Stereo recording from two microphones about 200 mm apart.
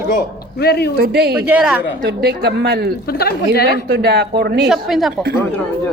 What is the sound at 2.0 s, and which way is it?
Speech, 55° right (ahead or behind).